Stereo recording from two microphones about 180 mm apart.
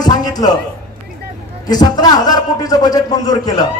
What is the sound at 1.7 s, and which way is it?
A man's voice, 20° left (ahead or behind).